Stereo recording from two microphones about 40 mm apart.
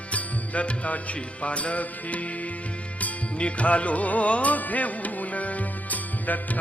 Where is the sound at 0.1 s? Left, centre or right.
Left.